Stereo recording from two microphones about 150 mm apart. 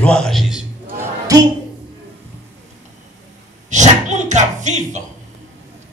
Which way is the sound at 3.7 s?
55° right (ahead or behind).